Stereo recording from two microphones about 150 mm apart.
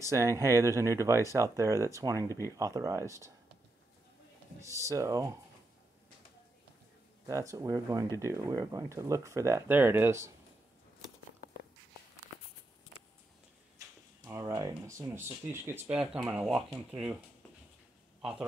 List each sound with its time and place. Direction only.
0.0 s speech: 20° right (ahead or behind)
4.6 s speech: 20° right (ahead or behind)
7.2 s speech: 20° right (ahead or behind)
14.2 s speech: 25° right (ahead or behind)
16.0 s speech: 5° right (ahead or behind)